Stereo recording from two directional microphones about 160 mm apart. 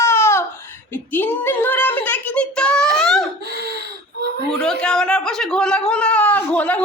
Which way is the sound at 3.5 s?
90° right.